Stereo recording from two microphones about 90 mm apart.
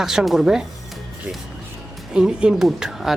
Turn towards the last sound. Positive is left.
turn(degrees=-5)  # may be behind; listen again after turning